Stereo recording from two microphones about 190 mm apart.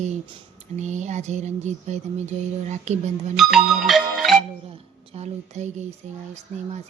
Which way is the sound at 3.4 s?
Centre (ahead or behind).